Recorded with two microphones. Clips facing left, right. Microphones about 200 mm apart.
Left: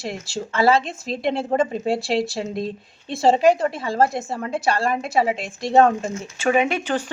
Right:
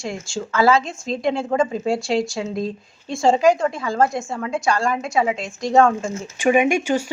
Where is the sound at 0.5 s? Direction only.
30° left (ahead or behind).